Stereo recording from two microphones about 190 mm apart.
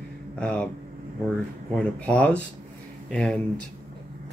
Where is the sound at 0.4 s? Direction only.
5° left (ahead or behind).